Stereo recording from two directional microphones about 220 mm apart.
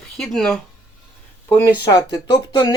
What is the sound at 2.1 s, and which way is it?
Speech, 20° left (ahead or behind).